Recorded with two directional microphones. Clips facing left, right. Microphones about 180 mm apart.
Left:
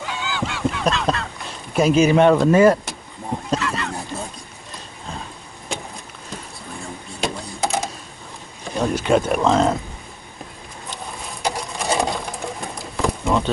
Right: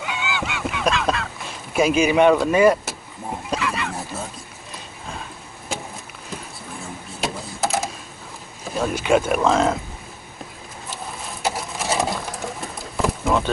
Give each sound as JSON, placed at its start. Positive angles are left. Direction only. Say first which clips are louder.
{"t": 0.1, "sound": "goose", "louder": "left 1 dB", "side_deg": -5}
{"t": 1.7, "sound": "speech", "louder": "left 3 dB", "side_deg": -10}
{"t": 3.4, "sound": "a sound", "louder": "left 1 dB", "side_deg": -10}
{"t": 6.8, "sound": "a sound", "louder": "left 2 dB", "side_deg": 0}
{"t": 8.6, "sound": "speech", "louder": "left 1 dB", "side_deg": -5}
{"t": 11.4, "sound": "sewing machine", "louder": "left 1 dB", "side_deg": -5}
{"t": 13.0, "sound": "pigeon", "louder": "even", "side_deg": 0}